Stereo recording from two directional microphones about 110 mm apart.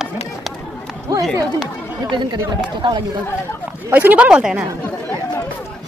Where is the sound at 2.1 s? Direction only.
40° right (ahead or behind).